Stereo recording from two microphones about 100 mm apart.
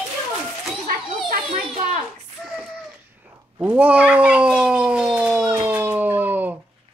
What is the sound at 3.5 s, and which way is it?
Cat, 15° right (ahead or behind).